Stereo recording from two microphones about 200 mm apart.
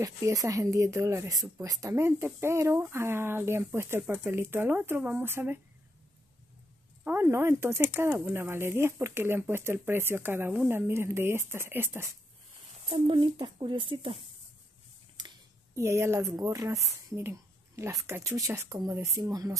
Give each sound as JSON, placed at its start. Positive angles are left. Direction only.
{"t": 0.0, "sound": "speech", "side_deg": -15}
{"t": 7.1, "sound": "speech", "side_deg": -10}
{"t": 12.9, "sound": "speech", "side_deg": -25}